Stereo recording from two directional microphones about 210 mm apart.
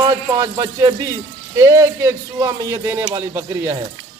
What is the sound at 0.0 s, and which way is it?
A man's voice, 20° right (ahead or behind).